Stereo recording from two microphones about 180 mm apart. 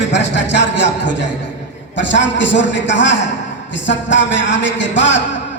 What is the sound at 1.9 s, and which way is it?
A man's voice, 90° left.